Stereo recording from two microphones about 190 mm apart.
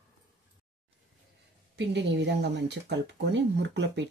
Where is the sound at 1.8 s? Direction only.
65° right (ahead or behind).